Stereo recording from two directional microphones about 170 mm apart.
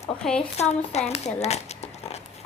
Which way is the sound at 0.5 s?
40° left (ahead or behind).